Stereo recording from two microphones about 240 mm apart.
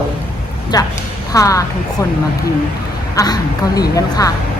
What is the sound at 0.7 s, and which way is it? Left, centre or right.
A woman's voice, centre.